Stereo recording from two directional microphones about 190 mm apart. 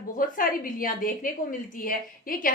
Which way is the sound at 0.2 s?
45° left (ahead or behind).